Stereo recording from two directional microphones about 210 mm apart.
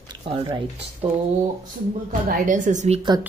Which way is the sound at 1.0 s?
30° right (ahead or behind).